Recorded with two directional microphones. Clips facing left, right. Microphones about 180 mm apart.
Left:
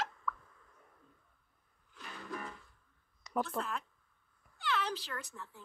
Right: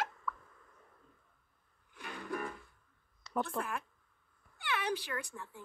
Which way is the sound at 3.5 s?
10° right (ahead or behind).